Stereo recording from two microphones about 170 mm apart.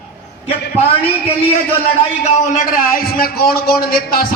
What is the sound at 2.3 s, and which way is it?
A man's voice, 50° left (ahead or behind).